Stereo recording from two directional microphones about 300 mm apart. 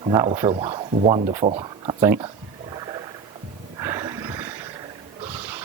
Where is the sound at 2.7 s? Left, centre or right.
Centre.